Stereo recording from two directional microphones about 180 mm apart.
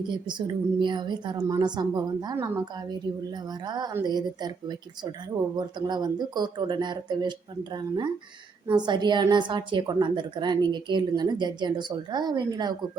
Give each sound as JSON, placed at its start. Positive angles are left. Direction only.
{"t": 0.1, "sound": "a woman's voice", "side_deg": -25}
{"t": 3.7, "sound": "a woman's voice", "side_deg": -25}